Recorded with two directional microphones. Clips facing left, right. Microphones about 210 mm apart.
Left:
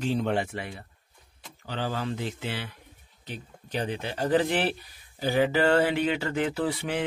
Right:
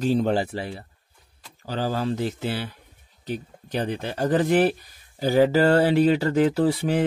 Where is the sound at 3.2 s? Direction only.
40° right (ahead or behind).